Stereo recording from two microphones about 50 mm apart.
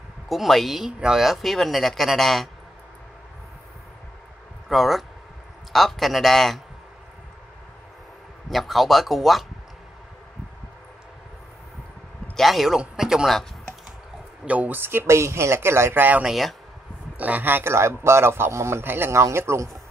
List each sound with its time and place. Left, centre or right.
0.3 s speech: centre
4.6 s speech: centre
8.5 s speech: centre
12.4 s speech: centre
14.4 s speech: right
14.7 s speech: right
15.0 s a man's voice: right
15.9 s speech: right
16.3 s speech: centre
17.2 s speech: right
17.7 s a man's voice: right
19.1 s a man's voice: right